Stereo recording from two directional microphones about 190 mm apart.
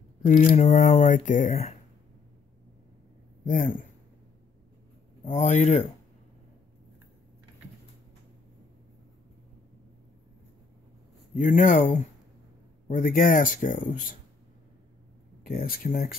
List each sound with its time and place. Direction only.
0.4 s speech: 40° left (ahead or behind)
3.4 s speech: 45° left (ahead or behind)
5.2 s speech: 40° left (ahead or behind)
11.3 s speech: 45° left (ahead or behind)
15.4 s speech: 50° left (ahead or behind)